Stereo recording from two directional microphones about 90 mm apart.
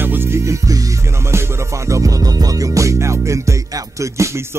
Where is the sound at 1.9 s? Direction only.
40° right (ahead or behind).